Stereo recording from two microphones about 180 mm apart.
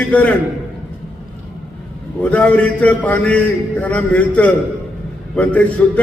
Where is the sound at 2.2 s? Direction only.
5° left (ahead or behind).